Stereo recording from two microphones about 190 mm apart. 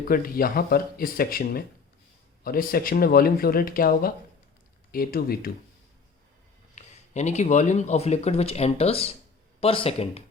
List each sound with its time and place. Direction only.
0.0 s speech: 50° left (ahead or behind)
6.7 s speech: 35° left (ahead or behind)